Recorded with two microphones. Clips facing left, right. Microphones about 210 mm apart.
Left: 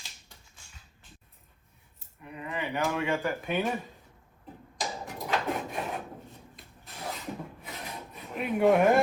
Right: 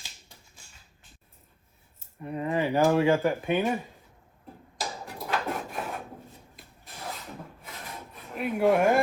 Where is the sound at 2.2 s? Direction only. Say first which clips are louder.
Right 8 dB; 40° right (ahead or behind).